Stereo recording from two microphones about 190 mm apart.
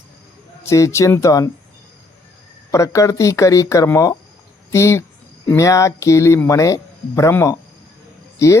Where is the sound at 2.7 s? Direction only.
15° left (ahead or behind).